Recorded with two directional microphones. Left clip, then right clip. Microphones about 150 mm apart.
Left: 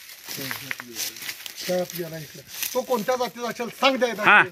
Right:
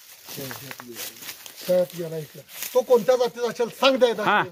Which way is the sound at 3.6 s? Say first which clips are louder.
Right 1 dB; 50° right (ahead or behind).